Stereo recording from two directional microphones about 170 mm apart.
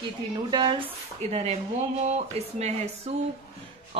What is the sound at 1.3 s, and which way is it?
Speech, 40° right (ahead or behind).